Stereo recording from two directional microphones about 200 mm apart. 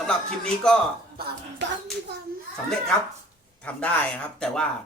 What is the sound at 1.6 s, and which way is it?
Hands, 60° right (ahead or behind).